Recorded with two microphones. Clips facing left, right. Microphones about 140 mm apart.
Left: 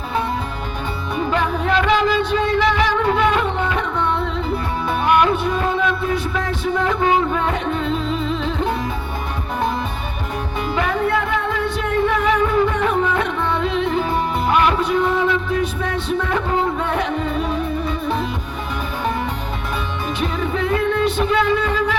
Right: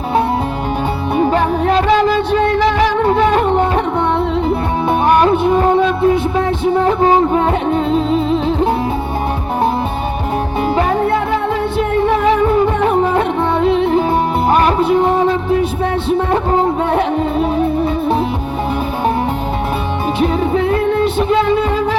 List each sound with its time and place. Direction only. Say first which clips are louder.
1.3 s music: right 6 dB; 40° right (ahead or behind)
6.3 s music: right 7 dB; 35° right (ahead or behind)
12.1 s music: right 6 dB; 35° right (ahead or behind)
20.2 s music: right 7 dB; 35° right (ahead or behind)